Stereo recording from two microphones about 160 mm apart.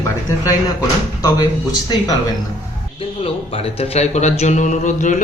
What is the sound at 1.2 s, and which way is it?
Speech, 25° left (ahead or behind).